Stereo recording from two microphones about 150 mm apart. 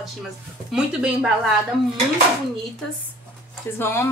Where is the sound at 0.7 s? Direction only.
5° right (ahead or behind).